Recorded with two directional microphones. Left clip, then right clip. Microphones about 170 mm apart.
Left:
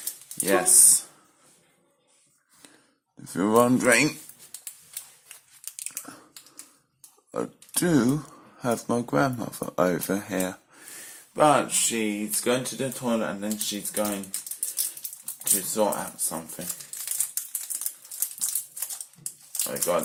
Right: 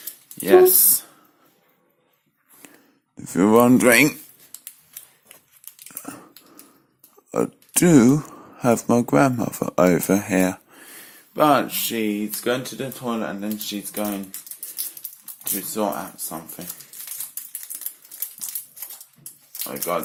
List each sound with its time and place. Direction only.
0.3 s speech: 20° right (ahead or behind)
3.2 s speech: 35° right (ahead or behind)
3.8 s speech: 55° right (ahead or behind)
6.0 s a sound: 40° right (ahead or behind)
7.3 s a sound: 40° right (ahead or behind)
9.0 s speech: 35° right (ahead or behind)
11.3 s speech: 25° right (ahead or behind)
15.4 s speech: 20° right (ahead or behind)
19.9 s speech: 15° right (ahead or behind)